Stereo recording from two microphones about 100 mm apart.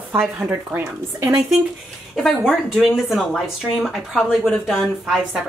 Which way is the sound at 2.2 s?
Centre (ahead or behind).